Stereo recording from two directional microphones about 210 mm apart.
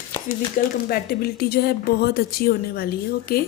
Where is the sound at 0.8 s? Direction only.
45° left (ahead or behind).